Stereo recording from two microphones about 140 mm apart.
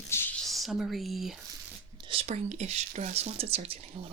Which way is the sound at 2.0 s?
45° right (ahead or behind).